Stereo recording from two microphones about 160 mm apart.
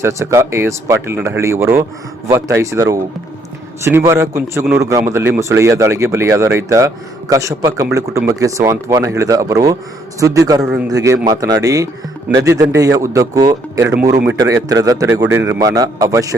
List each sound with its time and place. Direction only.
0.0 s a man's voice: 20° right (ahead or behind)
10.6 s a man's voice: 5° right (ahead or behind)
10.8 s a man's voice: 20° right (ahead or behind)